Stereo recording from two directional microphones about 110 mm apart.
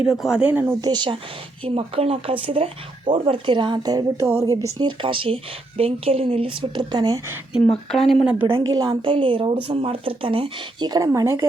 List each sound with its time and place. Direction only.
0.0 s speech: 5° right (ahead or behind)
0.8 s speech: 40° right (ahead or behind)
1.6 s a woman's voice: 60° right (ahead or behind); by 4.9 s 30° right (ahead or behind)
5.0 s speech: 55° right (ahead or behind)
7.7 s speech: 5° left (ahead or behind)
8.2 s speech: 10° right (ahead or behind)
8.9 s speech: 50° right (ahead or behind)
10.8 s speech: 35° right (ahead or behind)